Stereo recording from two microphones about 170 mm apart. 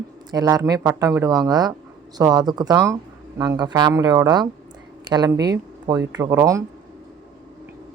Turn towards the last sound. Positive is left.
turn(degrees=-20)  # may be behind; listen again after turning